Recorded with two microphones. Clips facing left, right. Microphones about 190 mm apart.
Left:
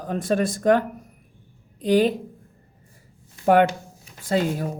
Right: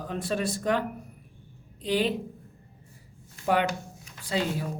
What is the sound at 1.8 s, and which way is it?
Speech, 45° left (ahead or behind).